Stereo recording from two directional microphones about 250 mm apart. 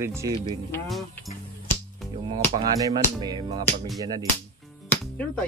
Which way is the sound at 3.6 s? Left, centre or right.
Centre.